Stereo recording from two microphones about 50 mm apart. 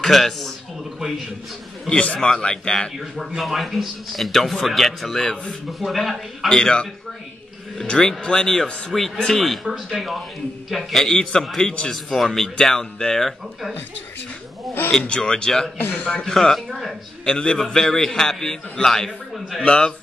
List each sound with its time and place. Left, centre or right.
0.0 s a man's voice: centre
1.9 s a man's voice: left
3.2 s a man's voice: centre
5.7 s a man's voice: centre
6.5 s a man's voice: centre
15.0 s a man's voice: centre
17.2 s a man's voice: left
17.6 s a man's voice: centre
19.6 s a man's voice: centre